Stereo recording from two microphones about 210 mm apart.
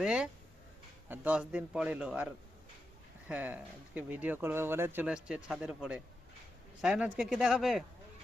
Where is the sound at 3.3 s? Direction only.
5° right (ahead or behind).